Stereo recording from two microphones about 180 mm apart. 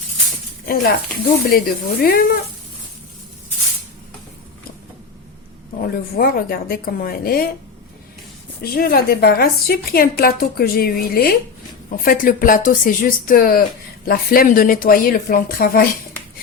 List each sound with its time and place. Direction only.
0.6 s a woman's voice: 55° left (ahead or behind)
5.8 s a woman's voice: 55° left (ahead or behind)
8.6 s a woman's voice: 55° left (ahead or behind)